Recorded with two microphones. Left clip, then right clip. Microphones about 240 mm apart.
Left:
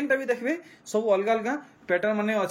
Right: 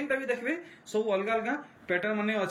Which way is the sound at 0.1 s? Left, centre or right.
Centre.